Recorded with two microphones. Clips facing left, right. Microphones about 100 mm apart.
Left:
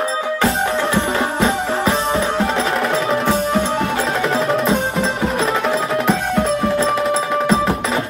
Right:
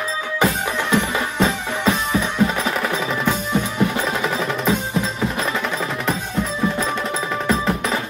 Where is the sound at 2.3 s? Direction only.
80° left.